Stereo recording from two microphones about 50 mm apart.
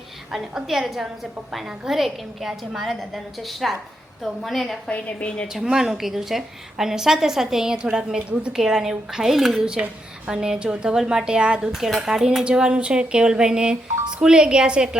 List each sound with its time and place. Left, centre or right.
0.3 s a woman's voice: centre
4.9 s a woman's voice: left
5.6 s a woman's voice: centre
9.7 s a woman's voice: centre
11.7 s a woman's voice: centre